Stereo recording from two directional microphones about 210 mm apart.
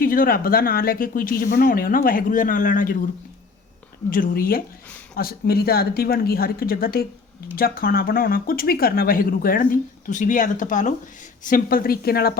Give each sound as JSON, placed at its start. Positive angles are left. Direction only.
{"t": 0.0, "sound": "speech", "side_deg": 40}
{"t": 4.1, "sound": "speech", "side_deg": 40}